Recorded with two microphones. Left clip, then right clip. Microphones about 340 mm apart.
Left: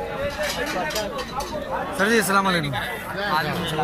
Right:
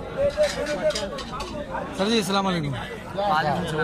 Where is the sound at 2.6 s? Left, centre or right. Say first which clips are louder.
Left 5 dB; right.